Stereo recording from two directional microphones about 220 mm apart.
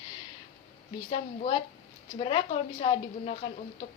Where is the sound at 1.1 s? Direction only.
25° left (ahead or behind).